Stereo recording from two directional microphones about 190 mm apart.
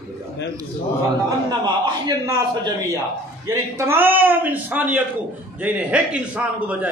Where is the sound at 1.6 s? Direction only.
20° right (ahead or behind).